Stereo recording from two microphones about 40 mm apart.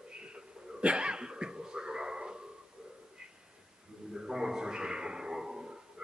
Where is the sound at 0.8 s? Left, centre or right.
Right.